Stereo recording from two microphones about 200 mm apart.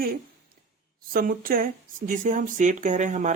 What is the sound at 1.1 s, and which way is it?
Speech, 45° right (ahead or behind).